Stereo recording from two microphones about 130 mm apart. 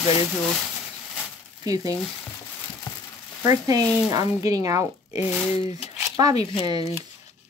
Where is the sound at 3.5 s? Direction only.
25° right (ahead or behind).